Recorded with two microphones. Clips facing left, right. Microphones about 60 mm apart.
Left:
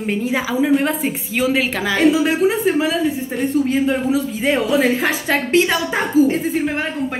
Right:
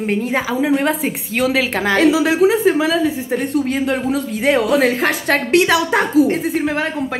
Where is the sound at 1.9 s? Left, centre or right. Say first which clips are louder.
Right 1 dB; right.